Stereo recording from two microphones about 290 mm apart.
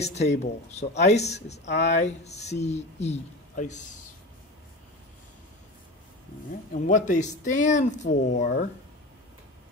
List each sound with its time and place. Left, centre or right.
0.0 s speech: left
6.7 s speech: left